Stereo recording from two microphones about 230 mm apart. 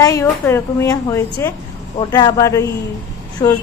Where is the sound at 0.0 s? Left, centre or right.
Centre.